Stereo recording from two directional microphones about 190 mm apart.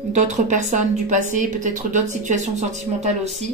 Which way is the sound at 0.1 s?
40° right (ahead or behind).